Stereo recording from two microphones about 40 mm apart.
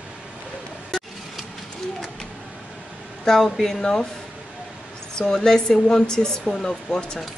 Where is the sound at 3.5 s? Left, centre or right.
Centre.